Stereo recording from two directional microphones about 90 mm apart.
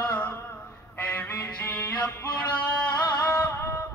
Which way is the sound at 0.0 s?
15° left (ahead or behind).